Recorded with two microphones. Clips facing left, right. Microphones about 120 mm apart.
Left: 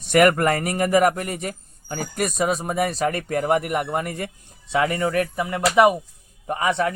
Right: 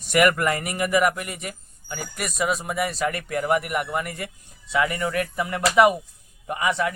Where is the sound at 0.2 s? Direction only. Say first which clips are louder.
Left 3 dB; 40° left (ahead or behind).